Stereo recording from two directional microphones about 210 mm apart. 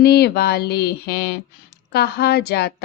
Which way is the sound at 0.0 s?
50° left (ahead or behind).